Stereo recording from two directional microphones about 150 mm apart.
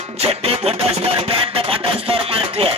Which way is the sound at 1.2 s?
40° right (ahead or behind).